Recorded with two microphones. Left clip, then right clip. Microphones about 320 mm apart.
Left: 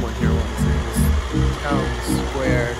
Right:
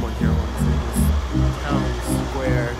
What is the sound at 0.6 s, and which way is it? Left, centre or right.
Speech, left.